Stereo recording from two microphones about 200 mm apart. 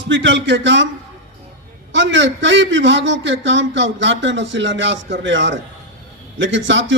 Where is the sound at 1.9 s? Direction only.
65° right (ahead or behind).